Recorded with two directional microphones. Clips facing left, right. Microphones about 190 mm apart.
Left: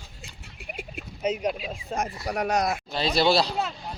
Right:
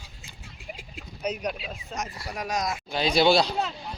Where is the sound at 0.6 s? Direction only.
65° left (ahead or behind).